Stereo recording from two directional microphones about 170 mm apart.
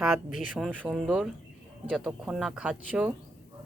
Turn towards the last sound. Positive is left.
turn(degrees=-5)  # may be behind; listen again after turning